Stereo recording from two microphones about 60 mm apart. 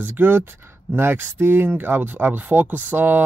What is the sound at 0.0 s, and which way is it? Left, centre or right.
Speech, right.